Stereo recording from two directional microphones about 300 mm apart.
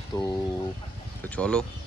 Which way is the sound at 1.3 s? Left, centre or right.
Centre.